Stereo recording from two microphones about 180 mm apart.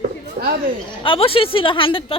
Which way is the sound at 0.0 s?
55° right (ahead or behind).